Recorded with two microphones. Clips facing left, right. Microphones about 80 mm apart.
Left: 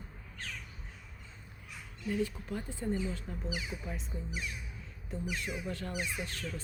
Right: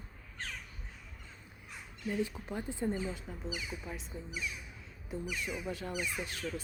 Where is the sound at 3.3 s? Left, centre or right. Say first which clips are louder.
Left 3 dB; centre.